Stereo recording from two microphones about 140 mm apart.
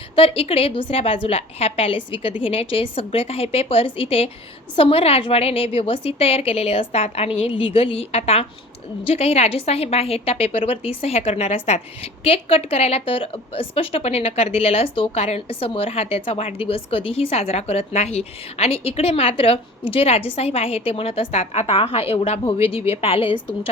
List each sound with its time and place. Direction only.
0.2 s a woman's voice: 45° left (ahead or behind)